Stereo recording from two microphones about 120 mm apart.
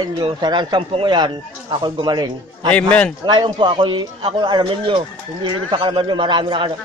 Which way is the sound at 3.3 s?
40° right (ahead or behind).